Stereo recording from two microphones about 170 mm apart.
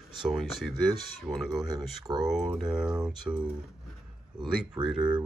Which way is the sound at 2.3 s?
5° right (ahead or behind).